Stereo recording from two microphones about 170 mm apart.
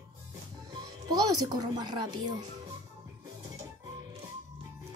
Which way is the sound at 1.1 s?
25° right (ahead or behind).